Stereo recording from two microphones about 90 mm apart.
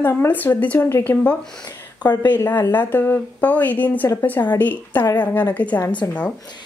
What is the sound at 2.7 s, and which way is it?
A woman's voice, 20° left (ahead or behind).